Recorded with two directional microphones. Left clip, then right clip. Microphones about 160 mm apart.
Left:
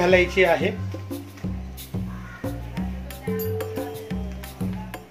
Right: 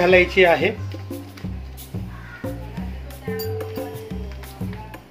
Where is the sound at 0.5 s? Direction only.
20° right (ahead or behind).